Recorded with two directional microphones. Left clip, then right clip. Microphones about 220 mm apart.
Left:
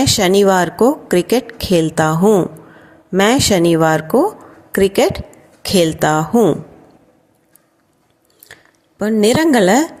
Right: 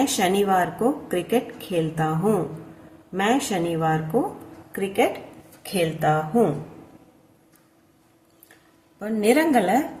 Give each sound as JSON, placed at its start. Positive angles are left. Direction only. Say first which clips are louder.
{"t": 0.0, "sound": "a woman's voice", "louder": "left 9 dB", "side_deg": 45}
{"t": 9.0, "sound": "a woman's voice", "louder": "left 7 dB", "side_deg": 40}